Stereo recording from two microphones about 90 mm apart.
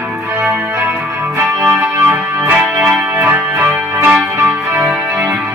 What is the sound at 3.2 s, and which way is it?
Music, 25° right (ahead or behind).